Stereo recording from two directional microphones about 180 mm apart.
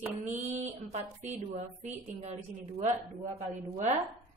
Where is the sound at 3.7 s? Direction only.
40° right (ahead or behind).